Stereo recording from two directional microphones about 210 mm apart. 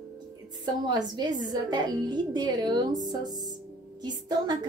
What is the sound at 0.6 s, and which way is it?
A woman's voice, 20° right (ahead or behind).